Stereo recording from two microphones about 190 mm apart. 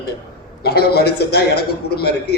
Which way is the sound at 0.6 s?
55° left (ahead or behind).